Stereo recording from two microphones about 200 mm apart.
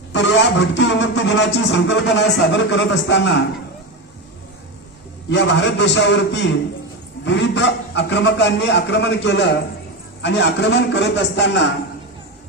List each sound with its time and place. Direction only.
0.1 s a man's voice: 60° left (ahead or behind)
5.3 s a man's voice: 60° left (ahead or behind)